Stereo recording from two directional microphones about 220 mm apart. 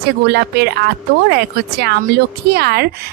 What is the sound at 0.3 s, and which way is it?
Speech, 50° right (ahead or behind).